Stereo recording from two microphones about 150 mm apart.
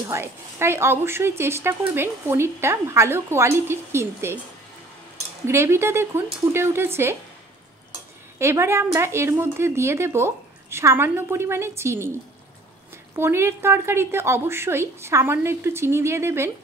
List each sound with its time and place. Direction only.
0.0 s a woman's voice: 20° right (ahead or behind)
5.5 s a woman's voice: 15° right (ahead or behind)
8.4 s a woman's voice: 20° right (ahead or behind)
13.1 s a woman's voice: 15° right (ahead or behind)